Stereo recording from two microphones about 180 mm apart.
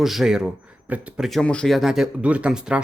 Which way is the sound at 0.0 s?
Centre (ahead or behind).